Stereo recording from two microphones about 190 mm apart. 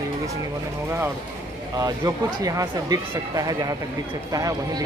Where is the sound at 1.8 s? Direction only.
20° right (ahead or behind).